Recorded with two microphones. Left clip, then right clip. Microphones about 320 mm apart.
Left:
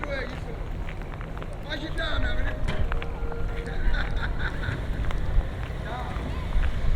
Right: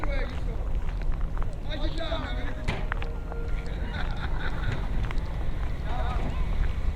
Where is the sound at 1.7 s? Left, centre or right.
Centre.